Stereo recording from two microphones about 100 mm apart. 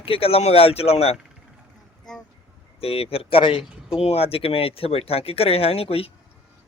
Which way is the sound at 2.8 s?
75° left (ahead or behind).